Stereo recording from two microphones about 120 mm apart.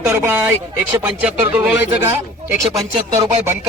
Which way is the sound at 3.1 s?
20° right (ahead or behind).